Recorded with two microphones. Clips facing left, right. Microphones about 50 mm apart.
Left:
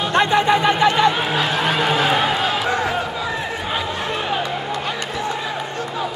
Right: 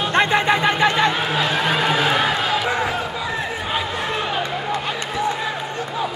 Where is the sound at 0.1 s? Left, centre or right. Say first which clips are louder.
Left 2 dB; right.